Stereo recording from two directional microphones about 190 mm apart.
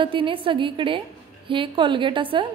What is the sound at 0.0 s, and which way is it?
A woman's voice, 25° right (ahead or behind).